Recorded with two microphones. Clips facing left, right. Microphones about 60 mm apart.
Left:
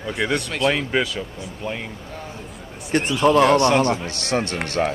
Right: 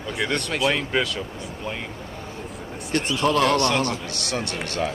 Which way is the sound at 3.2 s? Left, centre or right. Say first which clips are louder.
Left 5 dB; left.